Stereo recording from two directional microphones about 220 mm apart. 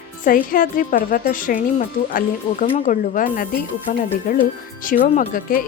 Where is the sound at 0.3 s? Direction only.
40° left (ahead or behind).